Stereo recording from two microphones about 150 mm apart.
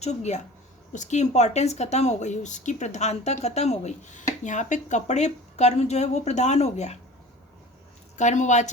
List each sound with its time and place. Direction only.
0.0 s speech: 50° left (ahead or behind)
8.1 s speech: 50° left (ahead or behind)